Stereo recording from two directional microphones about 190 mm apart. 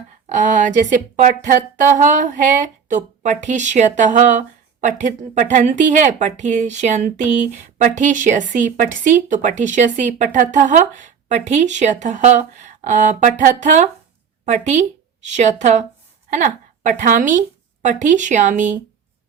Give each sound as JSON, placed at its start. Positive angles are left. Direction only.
{"t": 0.3, "sound": "a woman's voice", "side_deg": -40}